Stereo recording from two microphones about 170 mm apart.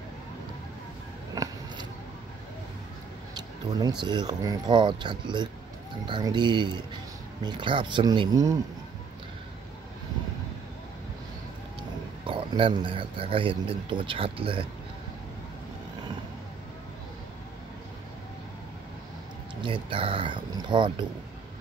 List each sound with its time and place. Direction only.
1.3 s a sound: 20° right (ahead or behind)
3.3 s speech: 25° right (ahead or behind)
12.3 s speech: 30° right (ahead or behind)
19.6 s speech: 30° right (ahead or behind)